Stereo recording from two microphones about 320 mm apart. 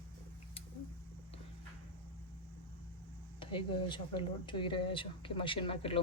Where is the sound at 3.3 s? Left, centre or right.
Centre.